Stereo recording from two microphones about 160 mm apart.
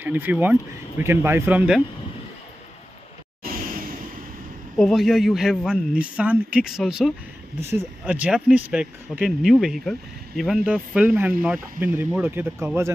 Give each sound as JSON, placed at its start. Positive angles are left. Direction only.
{"t": 0.0, "sound": "speech", "side_deg": -10}
{"t": 3.4, "sound": "a sound", "side_deg": -65}
{"t": 4.7, "sound": "a man's voice", "side_deg": 0}